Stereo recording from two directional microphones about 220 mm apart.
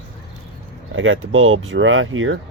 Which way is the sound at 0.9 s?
65° right (ahead or behind).